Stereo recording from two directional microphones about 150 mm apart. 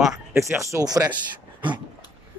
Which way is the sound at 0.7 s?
25° right (ahead or behind).